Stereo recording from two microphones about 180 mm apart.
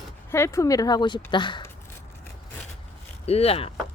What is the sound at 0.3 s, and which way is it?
Speech, 15° left (ahead or behind).